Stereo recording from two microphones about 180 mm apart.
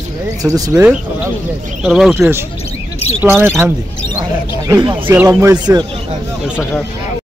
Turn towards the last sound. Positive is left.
turn(degrees=-10)  # may be behind; listen again after turning